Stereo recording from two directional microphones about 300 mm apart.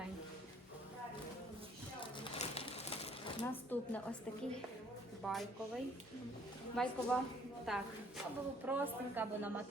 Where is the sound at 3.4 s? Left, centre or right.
Centre.